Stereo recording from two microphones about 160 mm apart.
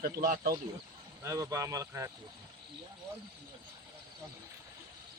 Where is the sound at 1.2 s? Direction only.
20° right (ahead or behind).